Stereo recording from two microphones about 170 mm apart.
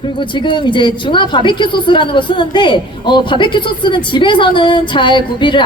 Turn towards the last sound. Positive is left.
turn(degrees=30)  # may be behind; listen again after turning